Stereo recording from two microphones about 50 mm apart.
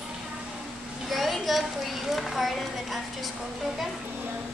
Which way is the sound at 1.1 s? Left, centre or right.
Centre.